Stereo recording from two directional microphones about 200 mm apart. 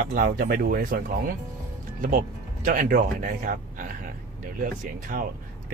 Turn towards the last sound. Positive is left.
turn(degrees=-45)  # may be behind; listen again after turning